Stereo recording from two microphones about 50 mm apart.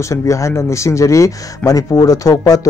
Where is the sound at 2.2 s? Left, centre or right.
Left.